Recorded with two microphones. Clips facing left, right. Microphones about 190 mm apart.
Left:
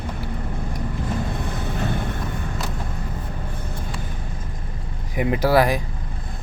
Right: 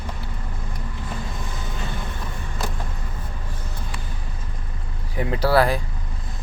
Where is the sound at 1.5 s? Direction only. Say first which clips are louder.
Left 6 dB; 60° left (ahead or behind).